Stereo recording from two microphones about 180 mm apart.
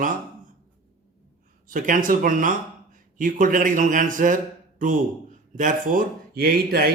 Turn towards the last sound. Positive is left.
turn(degrees=-55)  # may be behind; listen again after turning